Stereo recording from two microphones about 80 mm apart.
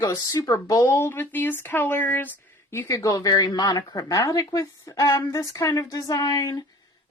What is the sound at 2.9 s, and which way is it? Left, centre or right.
Speech, left.